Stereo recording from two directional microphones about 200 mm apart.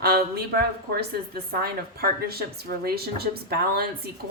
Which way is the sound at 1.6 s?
50° right (ahead or behind).